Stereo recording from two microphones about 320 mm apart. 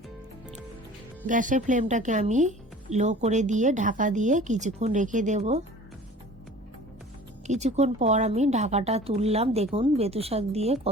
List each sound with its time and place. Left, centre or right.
1.3 s speech: right
7.4 s speech: right